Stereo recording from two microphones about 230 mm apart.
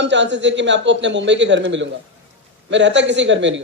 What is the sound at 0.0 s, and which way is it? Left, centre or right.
A man's voice, right.